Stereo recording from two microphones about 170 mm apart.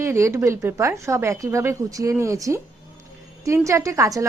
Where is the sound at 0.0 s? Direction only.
15° right (ahead or behind).